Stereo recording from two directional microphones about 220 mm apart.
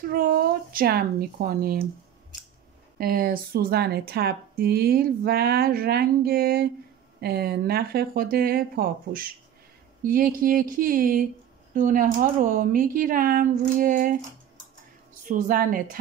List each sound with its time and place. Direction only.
0.0 s speech: 40° right (ahead or behind)
3.0 s speech: 40° right (ahead or behind)
15.2 s speech: 40° right (ahead or behind)